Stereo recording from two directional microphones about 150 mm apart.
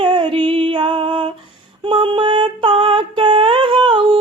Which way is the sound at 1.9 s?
35° right (ahead or behind).